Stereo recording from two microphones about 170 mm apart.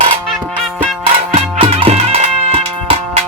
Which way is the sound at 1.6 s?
35° right (ahead or behind).